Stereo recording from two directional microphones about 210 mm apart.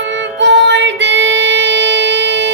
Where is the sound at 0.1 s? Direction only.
60° right (ahead or behind).